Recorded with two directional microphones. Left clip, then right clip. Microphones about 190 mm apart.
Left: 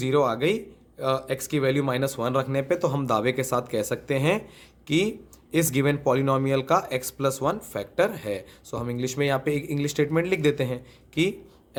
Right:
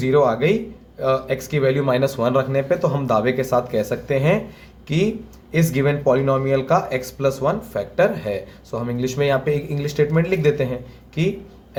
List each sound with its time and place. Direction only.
0.0 s speech: 40° left (ahead or behind)